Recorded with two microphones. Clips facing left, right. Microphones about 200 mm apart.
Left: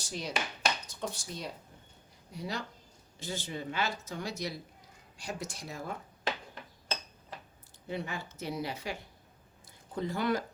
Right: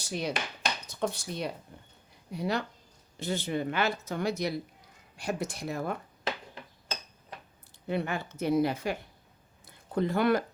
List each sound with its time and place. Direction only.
0.0 s speech: 60° right (ahead or behind)
7.9 s speech: 60° right (ahead or behind)
9.6 s a sound: 60° right (ahead or behind)